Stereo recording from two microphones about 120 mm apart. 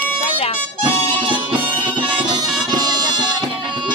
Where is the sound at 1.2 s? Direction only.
45° right (ahead or behind).